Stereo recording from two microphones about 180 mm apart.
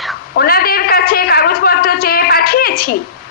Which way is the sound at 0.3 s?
55° left (ahead or behind).